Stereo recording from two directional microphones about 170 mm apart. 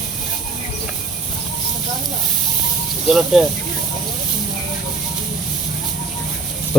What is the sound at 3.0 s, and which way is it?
Speech, centre (ahead or behind).